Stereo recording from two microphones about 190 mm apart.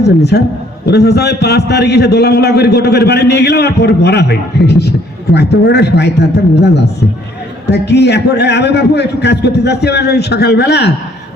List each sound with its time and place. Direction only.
0.0 s a man's voice: 60° left (ahead or behind)